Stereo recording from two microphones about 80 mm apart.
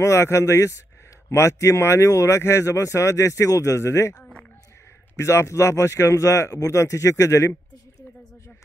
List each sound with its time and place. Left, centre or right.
0.0 s speech: left
4.2 s a sound: centre
5.1 s speech: left